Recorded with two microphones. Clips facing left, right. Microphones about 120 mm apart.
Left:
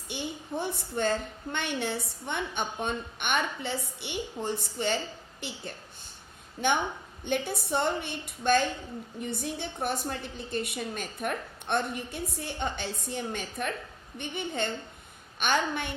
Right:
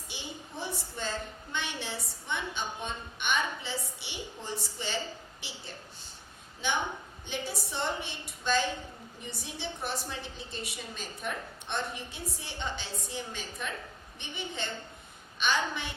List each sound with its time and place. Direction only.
0.1 s a woman's voice: 55° left (ahead or behind)
6.6 s a woman's voice: 55° left (ahead or behind)